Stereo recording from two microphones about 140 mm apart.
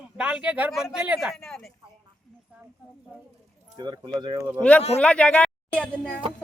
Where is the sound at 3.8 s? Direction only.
30° right (ahead or behind).